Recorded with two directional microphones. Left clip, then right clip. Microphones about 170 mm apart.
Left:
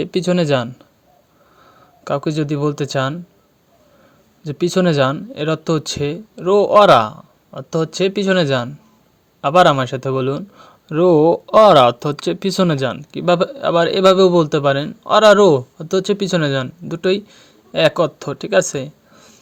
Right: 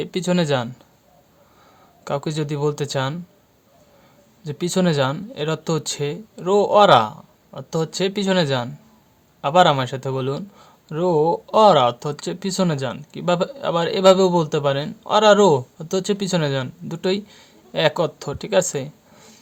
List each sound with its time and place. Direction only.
0.0 s speech: 20° left (ahead or behind)
2.0 s speech: 15° left (ahead or behind)
4.4 s speech: 20° left (ahead or behind)